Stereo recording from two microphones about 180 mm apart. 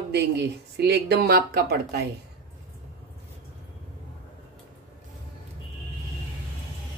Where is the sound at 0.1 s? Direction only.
70° right (ahead or behind).